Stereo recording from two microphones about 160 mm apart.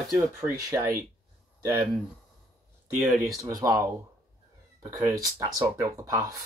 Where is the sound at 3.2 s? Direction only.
20° right (ahead or behind).